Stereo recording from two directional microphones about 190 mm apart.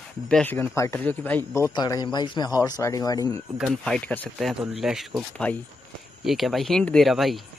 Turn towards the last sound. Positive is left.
turn(degrees=0)  # may be behind; listen again after turning